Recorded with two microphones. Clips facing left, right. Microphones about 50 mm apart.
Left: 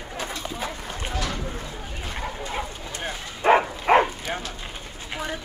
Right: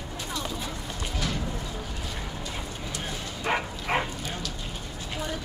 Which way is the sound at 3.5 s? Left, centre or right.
Left.